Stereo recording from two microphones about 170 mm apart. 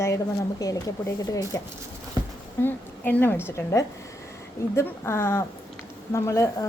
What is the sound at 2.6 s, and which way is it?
A woman's voice, 10° left (ahead or behind).